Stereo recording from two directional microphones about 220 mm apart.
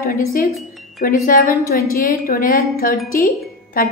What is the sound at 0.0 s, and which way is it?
A woman's voice, 40° left (ahead or behind).